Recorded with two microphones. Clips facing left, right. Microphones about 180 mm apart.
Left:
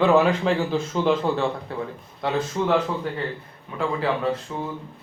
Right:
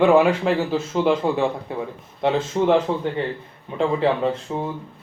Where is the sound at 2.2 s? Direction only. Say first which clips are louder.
Right 4 dB; 25° right (ahead or behind).